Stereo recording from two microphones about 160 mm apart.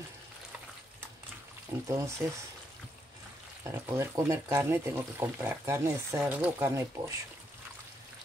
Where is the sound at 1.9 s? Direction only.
20° right (ahead or behind).